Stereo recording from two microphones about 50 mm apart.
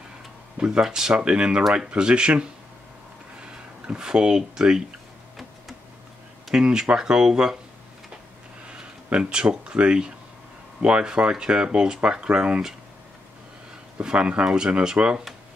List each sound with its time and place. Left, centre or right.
0.7 s speech: centre
1.2 s speech: right
3.8 s speech: centre
6.5 s speech: centre
8.6 s speech: centre
14.0 s speech: right